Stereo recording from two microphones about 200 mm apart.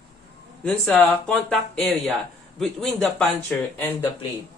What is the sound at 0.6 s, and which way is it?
Speech, 5° left (ahead or behind).